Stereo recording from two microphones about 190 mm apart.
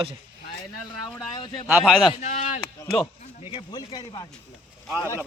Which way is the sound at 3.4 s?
25° left (ahead or behind).